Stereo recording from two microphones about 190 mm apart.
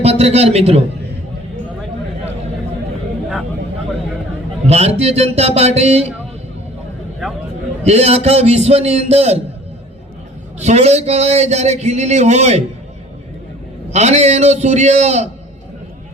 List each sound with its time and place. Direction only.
0.0 s a man's voice: 35° right (ahead or behind)
4.6 s a man's voice: 35° right (ahead or behind)
7.9 s a man's voice: 35° right (ahead or behind)
10.6 s a man's voice: 35° right (ahead or behind)
13.9 s a man's voice: 35° right (ahead or behind)